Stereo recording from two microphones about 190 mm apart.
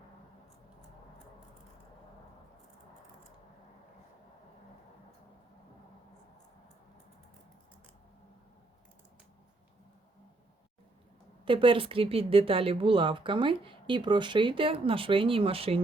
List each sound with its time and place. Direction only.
11.4 s speech: 25° right (ahead or behind)